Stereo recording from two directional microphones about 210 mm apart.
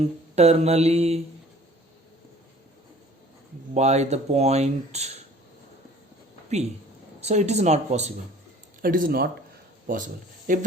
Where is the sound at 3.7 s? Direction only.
30° right (ahead or behind).